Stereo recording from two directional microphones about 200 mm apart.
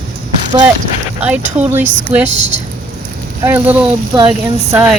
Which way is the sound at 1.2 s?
5° right (ahead or behind).